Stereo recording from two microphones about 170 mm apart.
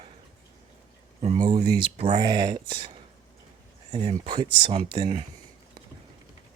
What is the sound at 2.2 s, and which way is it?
Speech, 25° right (ahead or behind).